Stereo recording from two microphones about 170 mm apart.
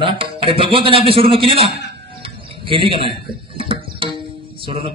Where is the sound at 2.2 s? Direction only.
30° right (ahead or behind).